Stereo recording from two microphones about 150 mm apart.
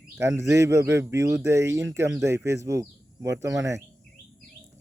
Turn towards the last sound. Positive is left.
turn(degrees=-20)  # may be behind; listen again after turning